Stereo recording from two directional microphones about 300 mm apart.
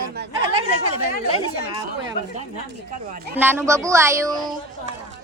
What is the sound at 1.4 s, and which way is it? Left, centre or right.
Speech, centre.